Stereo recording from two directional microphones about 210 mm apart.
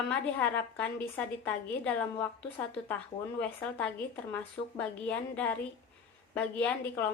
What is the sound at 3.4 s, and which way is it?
A woman's voice, 5° left (ahead or behind).